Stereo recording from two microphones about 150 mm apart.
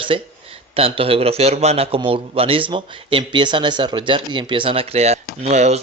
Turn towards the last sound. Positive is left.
turn(degrees=-45)  # may be behind; listen again after turning